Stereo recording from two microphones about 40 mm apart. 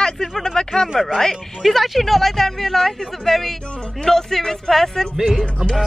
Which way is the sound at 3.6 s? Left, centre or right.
Left.